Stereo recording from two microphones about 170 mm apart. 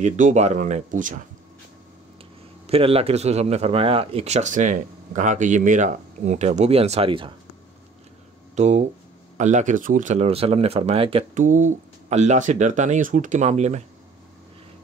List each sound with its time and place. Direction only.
0.0 s speech: 45° right (ahead or behind)
2.6 s speech: 35° right (ahead or behind)
8.5 s speech: 45° right (ahead or behind)
11.3 s speech: 45° right (ahead or behind)